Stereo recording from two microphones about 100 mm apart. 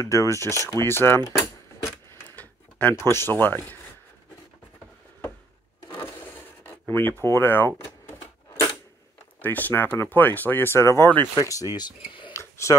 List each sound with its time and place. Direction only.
0.0 s speech: 35° left (ahead or behind)
2.3 s tick-tock: 15° left (ahead or behind)
3.1 s speech: 25° left (ahead or behind)
5.9 s zipper: 20° left (ahead or behind)
9.4 s speech: 15° left (ahead or behind); by 12.3 s 50° left (ahead or behind)
12.3 s a sound: 30° left (ahead or behind)